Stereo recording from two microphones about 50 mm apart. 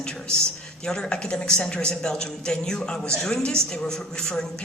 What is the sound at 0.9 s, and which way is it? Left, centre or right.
A man's voice, centre.